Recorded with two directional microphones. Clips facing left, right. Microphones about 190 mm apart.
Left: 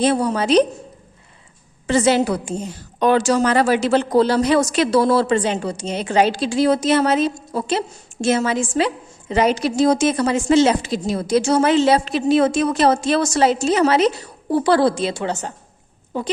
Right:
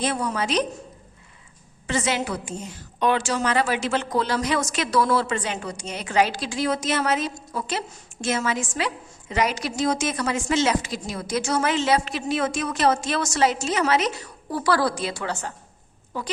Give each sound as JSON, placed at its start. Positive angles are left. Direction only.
{"t": 0.0, "sound": "a woman's voice", "side_deg": 30}
{"t": 1.9, "sound": "a woman's voice", "side_deg": 35}